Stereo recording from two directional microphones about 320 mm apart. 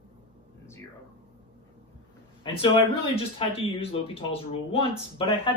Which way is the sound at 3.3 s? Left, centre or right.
Centre.